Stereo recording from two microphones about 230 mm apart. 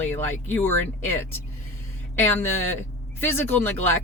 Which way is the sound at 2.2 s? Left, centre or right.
Centre.